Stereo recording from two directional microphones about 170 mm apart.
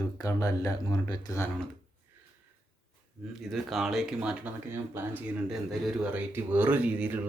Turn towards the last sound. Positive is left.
turn(degrees=-10)  # may be behind; listen again after turning